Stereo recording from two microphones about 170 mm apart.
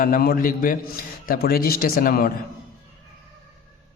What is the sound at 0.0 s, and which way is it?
Speech, 60° left (ahead or behind).